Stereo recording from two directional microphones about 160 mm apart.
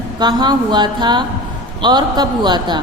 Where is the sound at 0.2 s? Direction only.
25° right (ahead or behind).